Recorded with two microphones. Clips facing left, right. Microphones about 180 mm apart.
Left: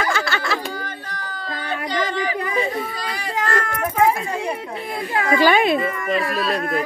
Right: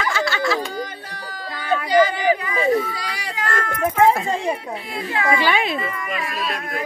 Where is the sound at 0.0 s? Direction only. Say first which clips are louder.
Right 1 dB; 55° left (ahead or behind).